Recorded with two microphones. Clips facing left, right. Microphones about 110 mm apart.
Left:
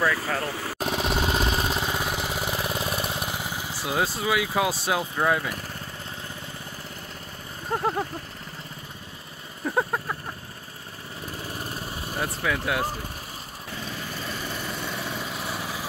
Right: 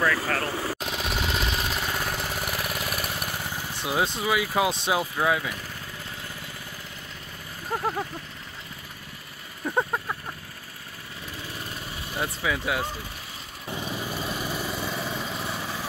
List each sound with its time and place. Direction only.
0.0 s speech: 15° left (ahead or behind)
0.7 s engine: 30° left (ahead or behind); by 3.8 s 15° left (ahead or behind)
3.8 s speech: 5° left (ahead or behind)
9.7 s a sound: centre (ahead or behind)
11.4 s vehicle: 40° left (ahead or behind)
12.4 s speech: centre (ahead or behind)
13.7 s vehicle: 15° right (ahead or behind); by 15.8 s 5° left (ahead or behind)